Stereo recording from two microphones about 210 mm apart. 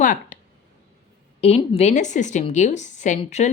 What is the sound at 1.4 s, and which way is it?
A woman's voice, 30° left (ahead or behind).